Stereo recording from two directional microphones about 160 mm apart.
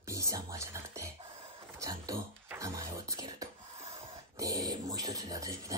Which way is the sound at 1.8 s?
20° right (ahead or behind).